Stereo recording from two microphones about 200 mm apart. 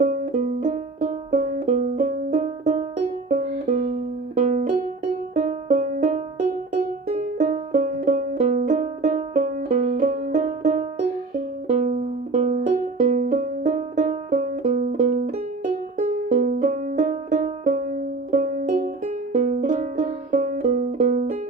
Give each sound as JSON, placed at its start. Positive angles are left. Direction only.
{"t": 0.0, "sound": "music", "side_deg": -40}